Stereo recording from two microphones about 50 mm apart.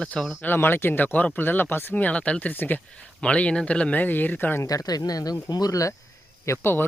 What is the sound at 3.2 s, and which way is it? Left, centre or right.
Speech, left.